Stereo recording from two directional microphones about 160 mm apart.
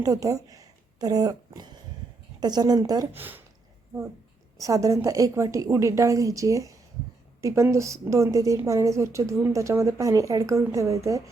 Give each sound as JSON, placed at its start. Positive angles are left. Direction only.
{"t": 0.0, "sound": "a woman's voice", "side_deg": -20}
{"t": 4.5, "sound": "a woman's voice", "side_deg": -20}